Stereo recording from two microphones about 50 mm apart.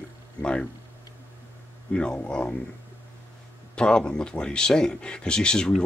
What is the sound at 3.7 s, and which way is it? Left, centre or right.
Speech, centre.